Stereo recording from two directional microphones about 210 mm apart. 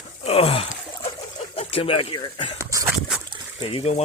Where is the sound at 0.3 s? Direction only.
25° left (ahead or behind).